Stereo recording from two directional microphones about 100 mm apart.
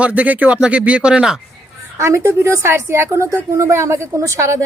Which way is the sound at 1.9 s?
30° right (ahead or behind).